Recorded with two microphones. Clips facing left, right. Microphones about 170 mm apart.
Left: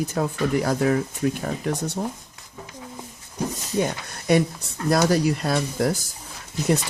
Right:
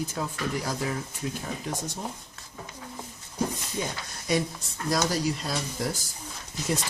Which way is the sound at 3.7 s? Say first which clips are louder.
Left 8 dB; 60° left (ahead or behind).